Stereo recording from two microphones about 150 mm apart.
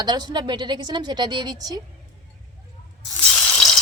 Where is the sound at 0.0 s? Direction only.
30° right (ahead or behind).